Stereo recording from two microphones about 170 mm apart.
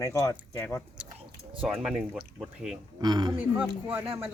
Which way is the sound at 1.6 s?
Centre (ahead or behind).